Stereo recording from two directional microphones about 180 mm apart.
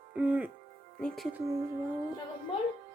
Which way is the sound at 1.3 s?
20° right (ahead or behind).